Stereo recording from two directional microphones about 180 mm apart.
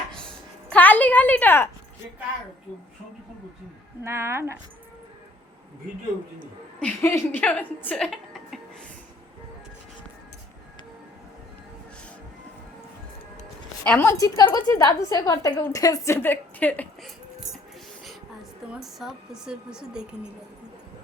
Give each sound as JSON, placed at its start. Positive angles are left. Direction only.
{"t": 0.7, "sound": "a sound", "side_deg": 10}
{"t": 4.0, "sound": "speech", "side_deg": -15}
{"t": 6.7, "sound": "speech", "side_deg": 10}
{"t": 13.8, "sound": "a woman's voice", "side_deg": 10}
{"t": 18.7, "sound": "a woman's voice", "side_deg": 0}